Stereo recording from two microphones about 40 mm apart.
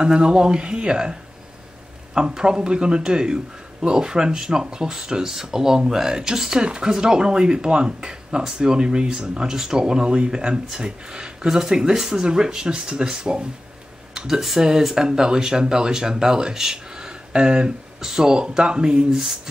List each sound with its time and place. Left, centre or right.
0.0 s speech: right
2.1 s speech: centre
14.1 s a sound: centre
14.6 s speech: centre